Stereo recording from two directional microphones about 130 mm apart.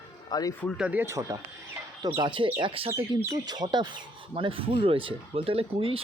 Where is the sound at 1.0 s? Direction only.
25° right (ahead or behind).